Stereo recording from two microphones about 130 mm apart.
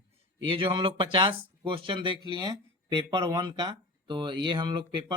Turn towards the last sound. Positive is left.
turn(degrees=-35)  # may be behind; listen again after turning